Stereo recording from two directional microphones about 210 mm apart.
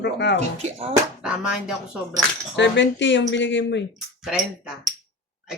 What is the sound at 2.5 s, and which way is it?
Speech, 55° left (ahead or behind).